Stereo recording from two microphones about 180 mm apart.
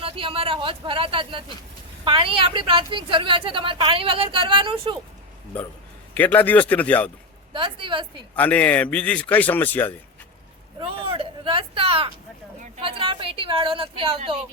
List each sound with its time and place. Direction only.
0.0 s a woman's voice: 30° right (ahead or behind)
6.1 s a man's voice: 10° left (ahead or behind)
7.5 s a woman's voice: 25° right (ahead or behind)
8.4 s a man's voice: 10° left (ahead or behind)
10.8 s a woman's voice: 30° right (ahead or behind)